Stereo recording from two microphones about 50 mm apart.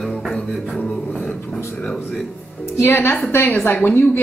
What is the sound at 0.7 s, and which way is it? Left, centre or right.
Beatboxing, left.